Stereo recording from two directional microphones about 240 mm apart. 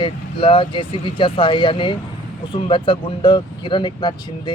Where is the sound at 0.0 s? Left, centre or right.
Left.